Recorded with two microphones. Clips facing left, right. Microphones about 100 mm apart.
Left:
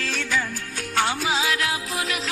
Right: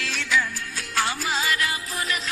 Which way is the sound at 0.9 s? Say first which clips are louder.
Left 3 dB; 80° left.